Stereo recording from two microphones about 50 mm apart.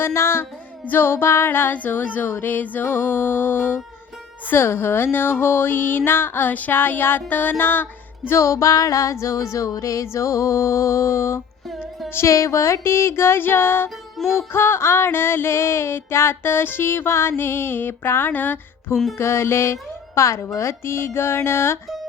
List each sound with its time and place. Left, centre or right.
0.0 s music: left
0.9 s music: left
6.7 s a sound: left
7.6 s music: left
8.4 s music: left
12.1 s music: left
14.2 s music: centre
14.5 s music: left
18.3 s a sound: left
19.1 s music: left
20.6 s music: left